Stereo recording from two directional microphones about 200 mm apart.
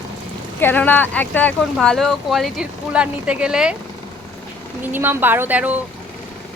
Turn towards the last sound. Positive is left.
turn(degrees=-10)  # may be behind; listen again after turning